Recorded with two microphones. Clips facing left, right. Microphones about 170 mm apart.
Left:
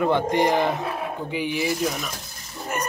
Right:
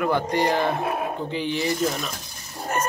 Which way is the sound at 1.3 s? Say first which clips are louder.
Left 2 dB; 10° left (ahead or behind).